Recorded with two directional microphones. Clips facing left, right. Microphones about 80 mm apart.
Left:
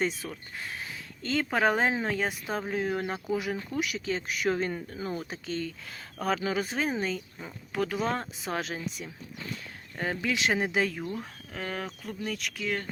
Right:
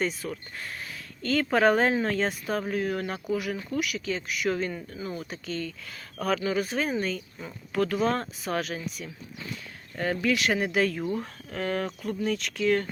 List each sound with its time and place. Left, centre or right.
0.0 s speech: left
11.0 s speech: centre